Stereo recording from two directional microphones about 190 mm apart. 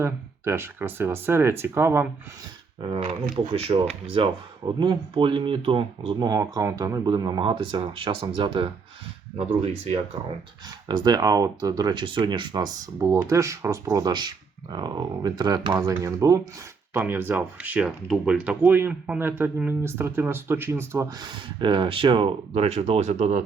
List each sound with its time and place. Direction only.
0.0 s speech: 15° right (ahead or behind)
2.8 s speech: 25° right (ahead or behind)
10.8 s speech: 20° right (ahead or behind); by 23.4 s 35° right (ahead or behind)